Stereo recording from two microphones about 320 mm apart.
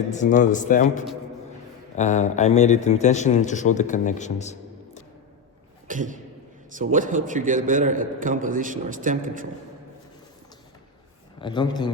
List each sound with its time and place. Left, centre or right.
0.1 s a man's voice: left
5.9 s a man's voice: right
11.3 s a man's voice: centre